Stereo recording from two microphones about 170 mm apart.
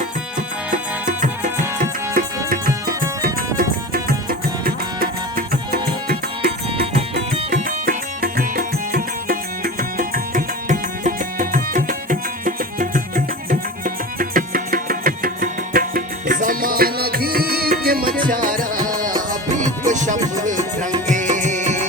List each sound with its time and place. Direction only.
1.0 s music: 50° right (ahead or behind)
20.3 s tabla: 50° right (ahead or behind)
21.1 s music: 45° right (ahead or behind)